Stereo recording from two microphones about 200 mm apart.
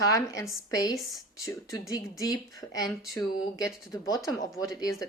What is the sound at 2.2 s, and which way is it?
Speech, 20° left (ahead or behind).